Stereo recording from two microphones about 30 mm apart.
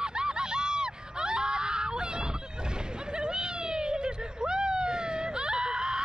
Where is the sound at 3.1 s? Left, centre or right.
Right.